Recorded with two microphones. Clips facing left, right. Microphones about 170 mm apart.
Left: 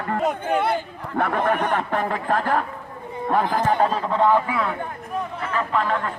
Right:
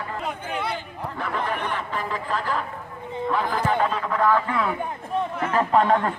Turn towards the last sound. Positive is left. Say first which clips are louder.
# right 4 dB
turn(degrees=-40)  # may be behind; listen again after turning